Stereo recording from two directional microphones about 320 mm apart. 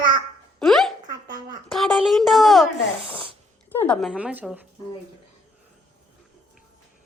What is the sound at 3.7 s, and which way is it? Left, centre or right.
Speech, centre.